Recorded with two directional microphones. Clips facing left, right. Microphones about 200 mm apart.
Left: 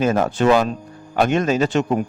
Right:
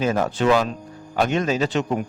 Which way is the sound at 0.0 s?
50° left (ahead or behind).